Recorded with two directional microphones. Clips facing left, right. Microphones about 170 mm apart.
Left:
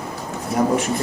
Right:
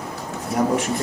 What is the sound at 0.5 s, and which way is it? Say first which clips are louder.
Speech: left 1 dB; 30° left (ahead or behind).